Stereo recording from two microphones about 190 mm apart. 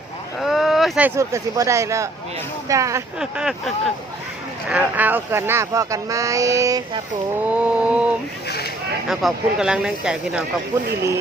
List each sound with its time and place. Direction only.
0.3 s speech: centre (ahead or behind); by 3.0 s 15° right (ahead or behind)
3.2 s speech: 5° right (ahead or behind)
7.4 s speech: 5° right (ahead or behind)
8.4 s a sound: 55° left (ahead or behind)
9.0 s speech: centre (ahead or behind)